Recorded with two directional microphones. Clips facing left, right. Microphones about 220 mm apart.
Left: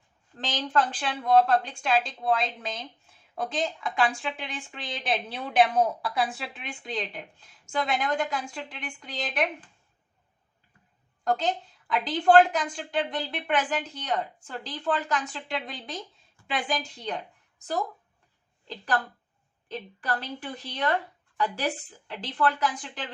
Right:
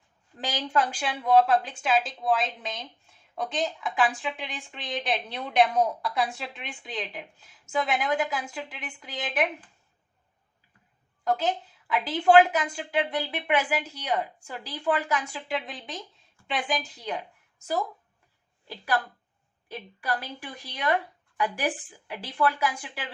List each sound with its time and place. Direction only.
0.3 s a woman's voice: 10° right (ahead or behind)
11.2 s a woman's voice: 5° right (ahead or behind)
18.7 s a woman's voice: 10° right (ahead or behind)